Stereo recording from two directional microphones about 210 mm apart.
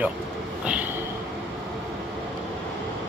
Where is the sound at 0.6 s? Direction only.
5° right (ahead or behind).